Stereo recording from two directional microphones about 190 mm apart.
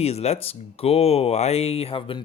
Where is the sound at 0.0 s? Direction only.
35° left (ahead or behind).